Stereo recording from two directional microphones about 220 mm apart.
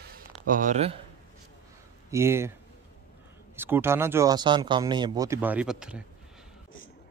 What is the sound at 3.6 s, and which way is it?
Speech, 10° right (ahead or behind).